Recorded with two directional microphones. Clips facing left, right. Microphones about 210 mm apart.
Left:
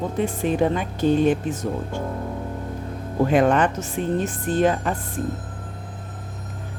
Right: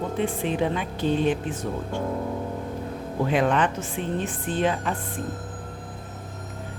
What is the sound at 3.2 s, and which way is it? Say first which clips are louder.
Speech: left 4 dB; 45° left (ahead or behind).